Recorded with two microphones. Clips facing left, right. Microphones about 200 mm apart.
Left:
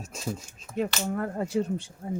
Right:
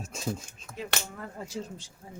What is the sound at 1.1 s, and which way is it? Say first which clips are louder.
Speech: left 11 dB; 60° left (ahead or behind).